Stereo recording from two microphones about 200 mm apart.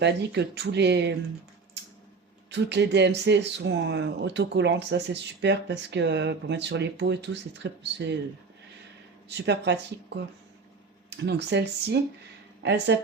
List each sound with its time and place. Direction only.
0.0 s speech: 55° right (ahead or behind)
2.5 s speech: 60° right (ahead or behind)
11.2 s speech: 60° right (ahead or behind)